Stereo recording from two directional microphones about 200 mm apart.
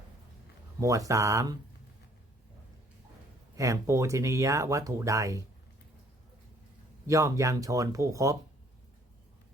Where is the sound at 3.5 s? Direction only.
15° right (ahead or behind).